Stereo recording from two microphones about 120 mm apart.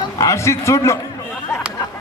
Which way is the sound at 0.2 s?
25° left (ahead or behind).